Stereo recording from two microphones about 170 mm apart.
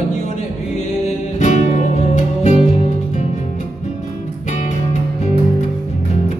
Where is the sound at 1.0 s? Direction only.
45° left (ahead or behind).